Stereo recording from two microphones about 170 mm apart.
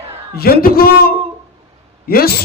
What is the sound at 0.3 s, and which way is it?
A man's voice, 65° left (ahead or behind).